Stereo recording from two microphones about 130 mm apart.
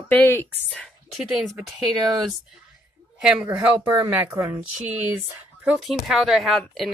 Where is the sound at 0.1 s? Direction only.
15° left (ahead or behind).